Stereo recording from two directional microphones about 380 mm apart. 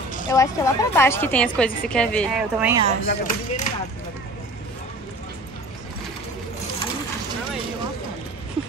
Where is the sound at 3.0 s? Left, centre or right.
Centre.